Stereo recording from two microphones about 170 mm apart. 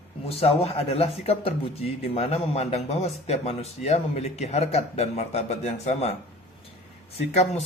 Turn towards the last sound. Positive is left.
turn(degrees=40)  # may be behind; listen again after turning